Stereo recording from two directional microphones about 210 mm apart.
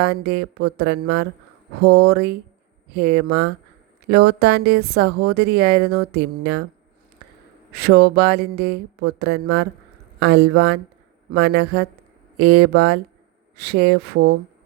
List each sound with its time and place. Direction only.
0.0 s speech: 50° right (ahead or behind)
7.7 s speech: 50° right (ahead or behind)